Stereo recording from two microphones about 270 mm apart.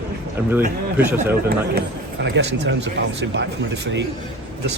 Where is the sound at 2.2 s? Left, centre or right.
Right.